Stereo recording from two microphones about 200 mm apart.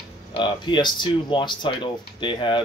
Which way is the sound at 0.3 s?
25° left (ahead or behind).